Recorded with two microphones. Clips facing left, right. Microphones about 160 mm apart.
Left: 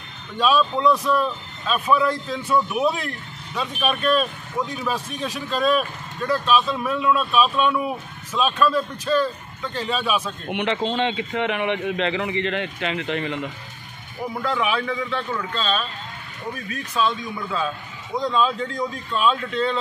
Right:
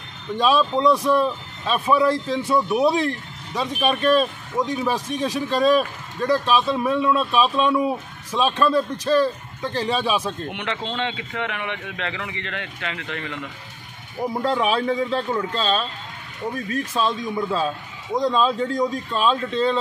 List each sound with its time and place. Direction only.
0.4 s speech: 30° right (ahead or behind)
10.5 s a man's voice: 20° left (ahead or behind)
14.3 s speech: 35° right (ahead or behind)